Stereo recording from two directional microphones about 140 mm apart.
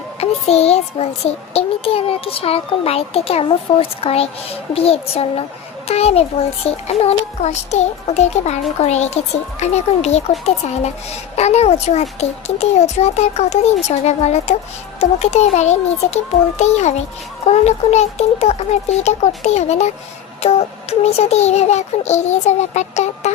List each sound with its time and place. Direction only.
0.2 s a child's voice: 50° left (ahead or behind)
11.3 s a child's voice: 50° left (ahead or behind)